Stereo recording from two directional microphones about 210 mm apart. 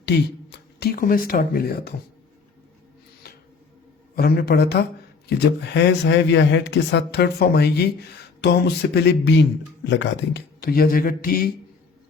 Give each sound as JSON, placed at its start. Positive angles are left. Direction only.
{"t": 0.5, "sound": "speech", "side_deg": 50}
{"t": 3.2, "sound": "a sound", "side_deg": 45}
{"t": 4.1, "sound": "speech", "side_deg": 45}